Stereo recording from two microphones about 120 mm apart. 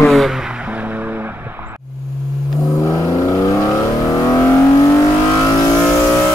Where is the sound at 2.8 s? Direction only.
25° left (ahead or behind).